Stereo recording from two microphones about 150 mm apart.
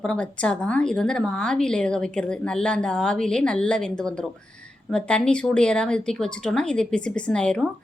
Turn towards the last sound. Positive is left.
turn(degrees=5)  # may be behind; listen again after turning